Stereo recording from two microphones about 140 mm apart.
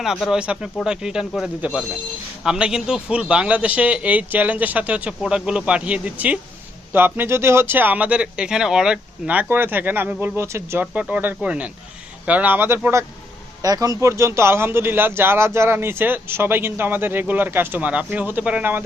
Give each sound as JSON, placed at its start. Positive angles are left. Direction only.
{"t": 0.0, "sound": "speech", "side_deg": 0}